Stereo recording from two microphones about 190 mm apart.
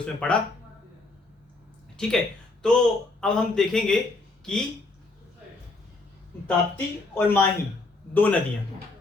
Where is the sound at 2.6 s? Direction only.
5° left (ahead or behind).